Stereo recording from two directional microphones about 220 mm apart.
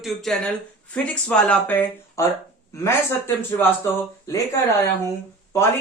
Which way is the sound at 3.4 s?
10° left (ahead or behind).